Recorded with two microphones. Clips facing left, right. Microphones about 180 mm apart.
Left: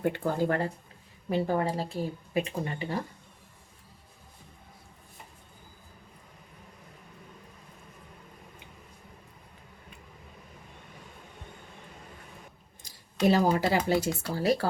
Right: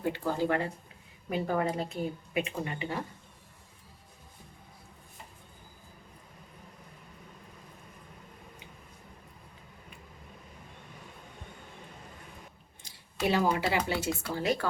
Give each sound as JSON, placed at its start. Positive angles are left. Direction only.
{"t": 0.0, "sound": "speech", "side_deg": 55}
{"t": 13.2, "sound": "speech", "side_deg": 40}